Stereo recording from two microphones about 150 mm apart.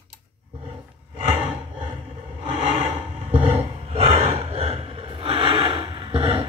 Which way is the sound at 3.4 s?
45° right (ahead or behind).